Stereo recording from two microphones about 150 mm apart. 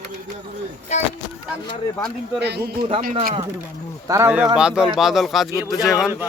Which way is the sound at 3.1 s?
65° right (ahead or behind).